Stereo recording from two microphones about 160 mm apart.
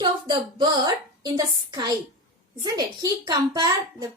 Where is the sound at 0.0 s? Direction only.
30° right (ahead or behind).